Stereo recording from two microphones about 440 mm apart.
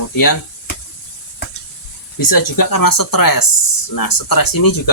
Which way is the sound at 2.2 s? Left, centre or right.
Left.